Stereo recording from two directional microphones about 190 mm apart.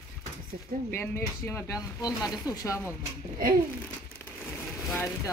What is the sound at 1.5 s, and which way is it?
Speech, 20° left (ahead or behind).